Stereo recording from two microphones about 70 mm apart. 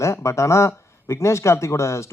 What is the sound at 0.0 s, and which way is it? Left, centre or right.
Speech, left.